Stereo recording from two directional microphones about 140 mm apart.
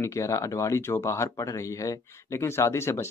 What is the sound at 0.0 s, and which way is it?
Speech, 20° left (ahead or behind).